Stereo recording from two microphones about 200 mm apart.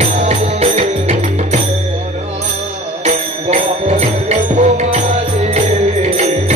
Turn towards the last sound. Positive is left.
turn(degrees=-30)  # may be behind; listen again after turning